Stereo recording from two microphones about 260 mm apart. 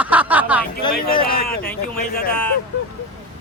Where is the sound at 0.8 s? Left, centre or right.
Centre.